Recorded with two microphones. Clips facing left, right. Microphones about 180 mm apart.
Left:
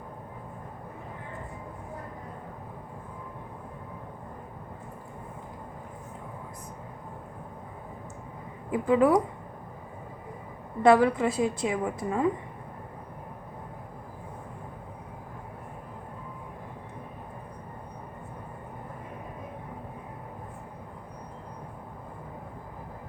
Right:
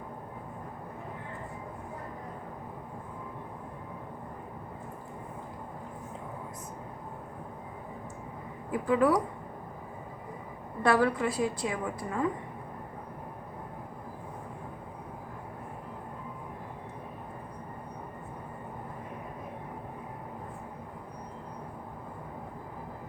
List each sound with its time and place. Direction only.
8.7 s a woman's voice: 20° left (ahead or behind)
10.8 s a woman's voice: 20° left (ahead or behind)